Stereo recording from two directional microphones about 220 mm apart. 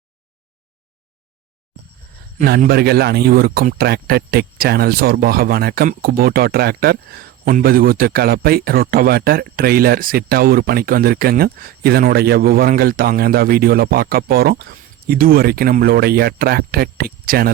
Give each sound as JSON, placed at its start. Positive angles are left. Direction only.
{"t": 2.4, "sound": "speech", "side_deg": -45}